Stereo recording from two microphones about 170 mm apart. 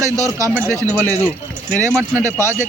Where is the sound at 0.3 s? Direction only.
15° right (ahead or behind).